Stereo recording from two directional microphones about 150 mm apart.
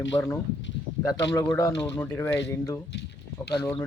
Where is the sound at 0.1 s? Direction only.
25° left (ahead or behind).